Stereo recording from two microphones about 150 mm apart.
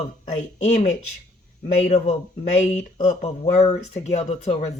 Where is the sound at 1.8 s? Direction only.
50° left (ahead or behind).